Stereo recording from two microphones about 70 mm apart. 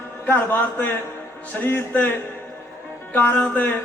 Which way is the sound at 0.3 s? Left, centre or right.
Left.